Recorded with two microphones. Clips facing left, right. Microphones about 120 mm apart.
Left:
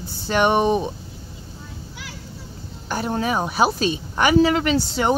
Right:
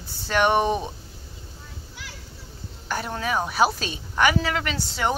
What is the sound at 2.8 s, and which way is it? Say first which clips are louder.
Speech: left 5 dB; 25° left (ahead or behind).